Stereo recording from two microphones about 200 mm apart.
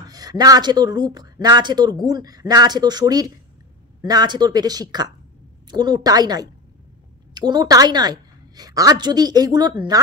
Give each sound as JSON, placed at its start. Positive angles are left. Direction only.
{"t": 0.0, "sound": "speech", "side_deg": -20}